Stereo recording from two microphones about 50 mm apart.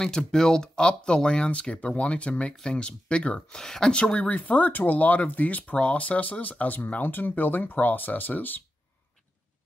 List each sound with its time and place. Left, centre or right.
0.0 s speech: centre
3.3 s speech: centre
3.9 s speech: left